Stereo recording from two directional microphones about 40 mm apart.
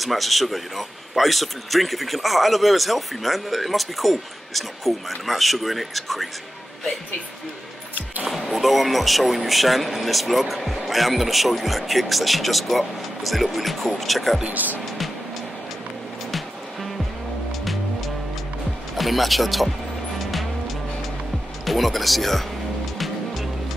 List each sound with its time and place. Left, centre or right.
0.0 s speech: centre
8.3 s speech: centre
14.5 s speech: right
16.3 s music: centre
18.9 s speech: centre
20.2 s music: centre
21.6 s speech: centre
22.9 s music: centre